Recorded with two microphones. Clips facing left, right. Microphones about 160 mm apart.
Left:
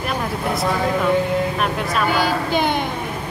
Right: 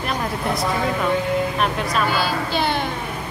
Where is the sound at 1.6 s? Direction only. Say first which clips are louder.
Even; centre (ahead or behind).